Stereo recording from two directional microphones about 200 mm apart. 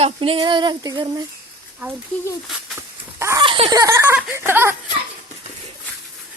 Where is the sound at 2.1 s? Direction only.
5° left (ahead or behind).